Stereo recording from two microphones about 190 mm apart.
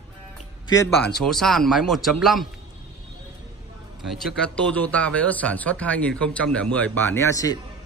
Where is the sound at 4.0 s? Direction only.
Centre (ahead or behind); by 7.6 s 20° left (ahead or behind).